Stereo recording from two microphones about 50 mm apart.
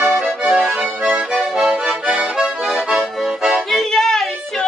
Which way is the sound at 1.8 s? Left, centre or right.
Centre.